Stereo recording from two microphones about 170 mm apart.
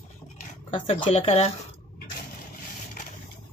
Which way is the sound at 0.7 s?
30° left (ahead or behind).